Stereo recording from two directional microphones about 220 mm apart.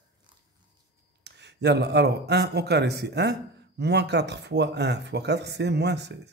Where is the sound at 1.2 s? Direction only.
50° right (ahead or behind).